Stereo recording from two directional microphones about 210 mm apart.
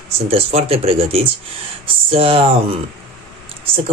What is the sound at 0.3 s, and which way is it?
Speech, 30° right (ahead or behind).